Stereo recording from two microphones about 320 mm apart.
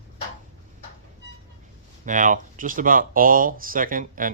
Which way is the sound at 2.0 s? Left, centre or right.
Right.